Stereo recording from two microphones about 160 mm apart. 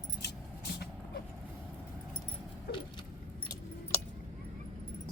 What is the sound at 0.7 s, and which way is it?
Vehicle, 90° left.